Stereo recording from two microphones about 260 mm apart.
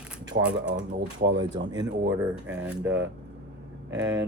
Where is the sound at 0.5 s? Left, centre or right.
Right.